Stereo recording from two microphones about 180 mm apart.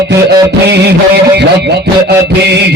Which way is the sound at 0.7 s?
65° right (ahead or behind).